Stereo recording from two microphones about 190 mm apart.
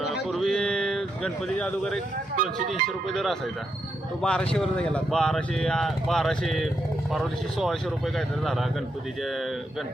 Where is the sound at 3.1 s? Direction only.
Centre (ahead or behind).